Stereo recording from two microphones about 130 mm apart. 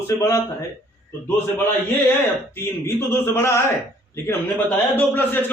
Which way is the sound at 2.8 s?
20° left (ahead or behind).